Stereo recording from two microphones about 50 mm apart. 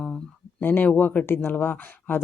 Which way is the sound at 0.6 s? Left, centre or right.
Left.